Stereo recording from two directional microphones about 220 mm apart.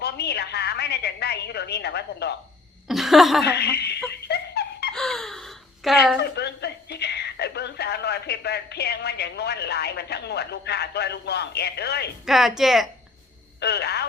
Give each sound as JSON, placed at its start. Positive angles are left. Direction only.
{"t": 0.0, "sound": "a woman's voice", "side_deg": 45}
{"t": 2.8, "sound": "speech", "side_deg": 0}
{"t": 3.4, "sound": "a woman's voice", "side_deg": 45}
{"t": 4.1, "sound": "snicker", "side_deg": 50}
{"t": 4.9, "sound": "gasp", "side_deg": 0}
{"t": 6.3, "sound": "speech", "side_deg": 50}
{"t": 12.2, "sound": "speech", "side_deg": 0}
{"t": 13.6, "sound": "a woman's voice", "side_deg": 50}